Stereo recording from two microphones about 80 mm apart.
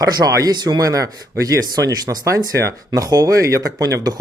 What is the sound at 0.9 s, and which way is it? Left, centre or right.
Speech, right.